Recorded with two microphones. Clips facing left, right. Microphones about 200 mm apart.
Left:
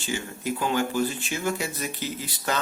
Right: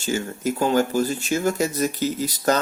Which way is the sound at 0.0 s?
40° right (ahead or behind).